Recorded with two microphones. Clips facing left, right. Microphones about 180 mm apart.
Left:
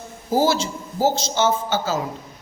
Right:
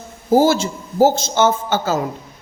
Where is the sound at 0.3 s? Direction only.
50° right (ahead or behind).